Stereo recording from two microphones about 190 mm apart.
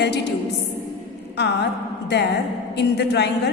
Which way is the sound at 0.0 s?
60° left (ahead or behind).